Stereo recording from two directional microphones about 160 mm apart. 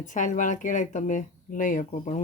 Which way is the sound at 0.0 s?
50° left (ahead or behind).